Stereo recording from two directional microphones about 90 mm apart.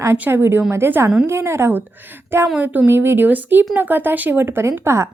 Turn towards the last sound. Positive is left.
turn(degrees=-30)  # may be behind; listen again after turning